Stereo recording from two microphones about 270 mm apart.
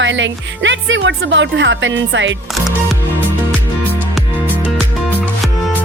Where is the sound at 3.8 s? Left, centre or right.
Centre.